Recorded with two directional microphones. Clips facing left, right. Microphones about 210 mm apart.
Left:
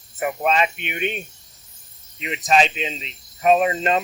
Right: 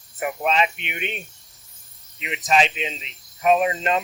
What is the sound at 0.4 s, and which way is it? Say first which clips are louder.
Speech: left 1 dB; 45° left (ahead or behind).